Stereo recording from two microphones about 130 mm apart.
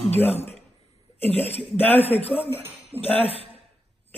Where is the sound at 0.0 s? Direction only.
50° left (ahead or behind).